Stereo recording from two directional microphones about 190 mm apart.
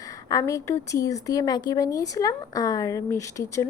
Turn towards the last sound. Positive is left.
turn(degrees=15)  # may be behind; listen again after turning